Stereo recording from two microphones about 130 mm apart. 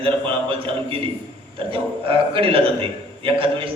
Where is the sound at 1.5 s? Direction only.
45° right (ahead or behind).